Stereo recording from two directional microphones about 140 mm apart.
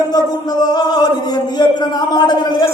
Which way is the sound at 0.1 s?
30° left (ahead or behind).